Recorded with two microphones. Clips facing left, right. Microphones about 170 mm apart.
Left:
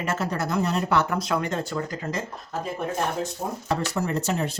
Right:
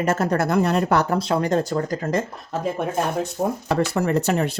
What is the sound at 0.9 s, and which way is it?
A woman's voice, 30° right (ahead or behind).